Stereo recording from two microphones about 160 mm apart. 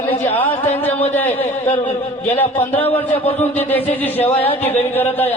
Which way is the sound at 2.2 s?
10° left (ahead or behind).